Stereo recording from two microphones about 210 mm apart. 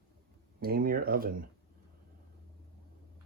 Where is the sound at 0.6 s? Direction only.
45° right (ahead or behind).